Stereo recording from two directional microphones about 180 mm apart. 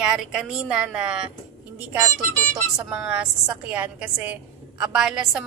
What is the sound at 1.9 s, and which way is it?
Speech, 15° right (ahead or behind).